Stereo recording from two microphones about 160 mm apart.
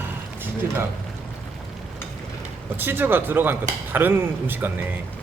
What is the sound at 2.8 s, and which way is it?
Speech, 15° right (ahead or behind).